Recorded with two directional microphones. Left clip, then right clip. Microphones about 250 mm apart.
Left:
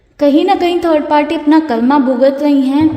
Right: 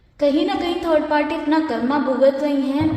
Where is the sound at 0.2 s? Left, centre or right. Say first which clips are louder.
Left 8 dB; left.